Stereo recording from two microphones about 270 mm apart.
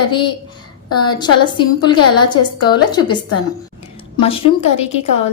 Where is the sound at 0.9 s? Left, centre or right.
Centre.